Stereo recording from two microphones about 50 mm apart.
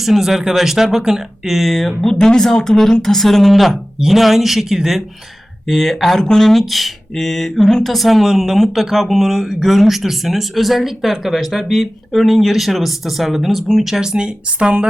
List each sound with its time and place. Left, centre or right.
0.0 s speech: centre
5.6 s speech: centre